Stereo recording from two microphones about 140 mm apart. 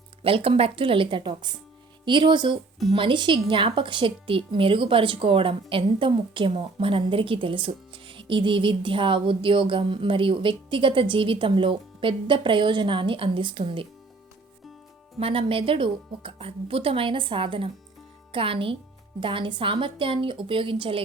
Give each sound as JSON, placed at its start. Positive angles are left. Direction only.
{"t": 0.2, "sound": "a woman's voice", "side_deg": -40}
{"t": 15.2, "sound": "a woman's voice", "side_deg": -40}